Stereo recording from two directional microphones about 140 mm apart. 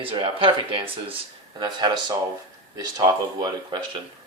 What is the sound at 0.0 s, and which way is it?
Speech, 35° right (ahead or behind).